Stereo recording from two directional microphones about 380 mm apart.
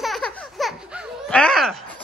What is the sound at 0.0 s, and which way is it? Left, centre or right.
Baby laughter, centre.